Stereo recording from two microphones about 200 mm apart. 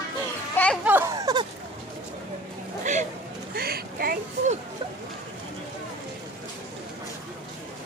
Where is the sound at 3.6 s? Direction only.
50° right (ahead or behind).